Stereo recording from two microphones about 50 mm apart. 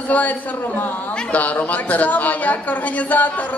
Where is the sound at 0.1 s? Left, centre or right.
Left.